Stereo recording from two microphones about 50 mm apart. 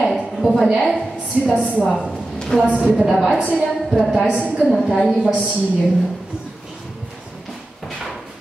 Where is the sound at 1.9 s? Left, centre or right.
Centre.